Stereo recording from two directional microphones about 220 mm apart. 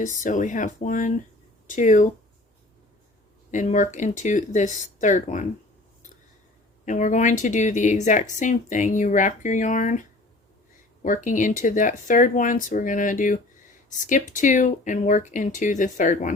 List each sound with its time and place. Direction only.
0.0 s speech: 35° left (ahead or behind)
3.5 s speech: 35° left (ahead or behind)
6.8 s speech: 35° left (ahead or behind)
11.0 s speech: 35° left (ahead or behind)